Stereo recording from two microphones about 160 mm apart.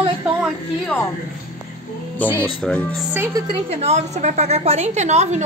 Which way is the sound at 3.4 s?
25° right (ahead or behind).